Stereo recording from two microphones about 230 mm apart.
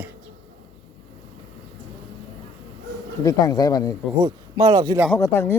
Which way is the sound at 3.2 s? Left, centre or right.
Centre.